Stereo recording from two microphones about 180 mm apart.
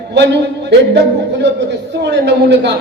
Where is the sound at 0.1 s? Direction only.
70° right (ahead or behind).